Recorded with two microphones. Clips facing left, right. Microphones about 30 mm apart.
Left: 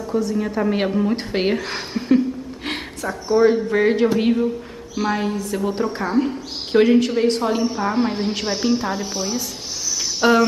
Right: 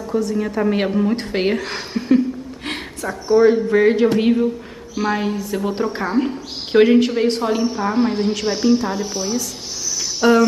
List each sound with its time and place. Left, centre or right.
0.0 s a woman's voice: centre
10.2 s music: centre